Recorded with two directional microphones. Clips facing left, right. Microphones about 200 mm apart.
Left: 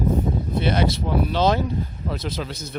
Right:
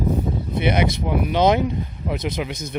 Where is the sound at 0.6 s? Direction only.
15° right (ahead or behind).